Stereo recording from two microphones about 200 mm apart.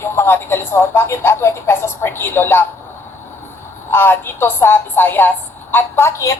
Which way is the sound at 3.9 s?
10° left (ahead or behind).